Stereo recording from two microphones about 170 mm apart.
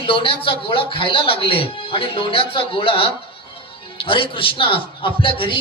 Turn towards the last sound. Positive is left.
turn(degrees=30)  # may be behind; listen again after turning